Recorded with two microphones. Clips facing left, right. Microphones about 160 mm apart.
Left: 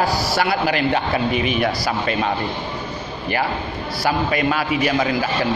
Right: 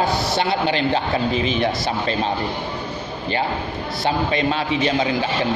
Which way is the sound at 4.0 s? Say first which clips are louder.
Left 1 dB; 25° right (ahead or behind).